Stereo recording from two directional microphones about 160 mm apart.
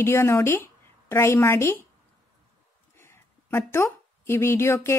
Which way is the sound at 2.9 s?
15° left (ahead or behind).